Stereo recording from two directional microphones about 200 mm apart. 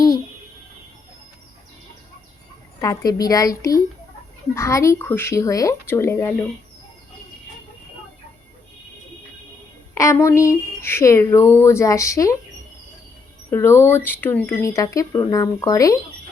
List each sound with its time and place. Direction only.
2.8 s speech: 15° left (ahead or behind)
4.5 s speech: 15° left (ahead or behind)
9.9 s speech: 15° left (ahead or behind)
13.5 s speech: 10° left (ahead or behind)